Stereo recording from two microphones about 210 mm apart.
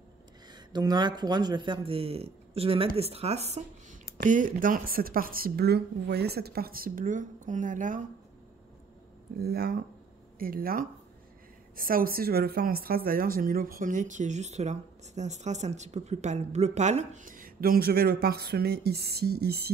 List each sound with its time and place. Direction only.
0.5 s speech: 20° right (ahead or behind); by 8.0 s 40° right (ahead or behind)
9.4 s speech: 50° right (ahead or behind)